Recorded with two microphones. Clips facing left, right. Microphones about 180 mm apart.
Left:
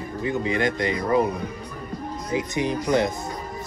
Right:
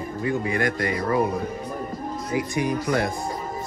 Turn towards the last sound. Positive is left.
turn(degrees=20)  # may be behind; listen again after turning